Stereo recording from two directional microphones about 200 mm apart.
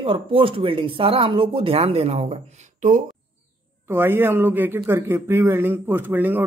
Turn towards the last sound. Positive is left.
turn(degrees=-10)  # may be behind; listen again after turning